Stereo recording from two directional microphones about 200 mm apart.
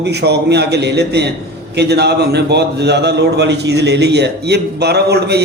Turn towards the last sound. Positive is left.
turn(degrees=-55)  # may be behind; listen again after turning